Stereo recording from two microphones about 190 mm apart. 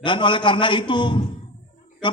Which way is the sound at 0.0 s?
25° left (ahead or behind).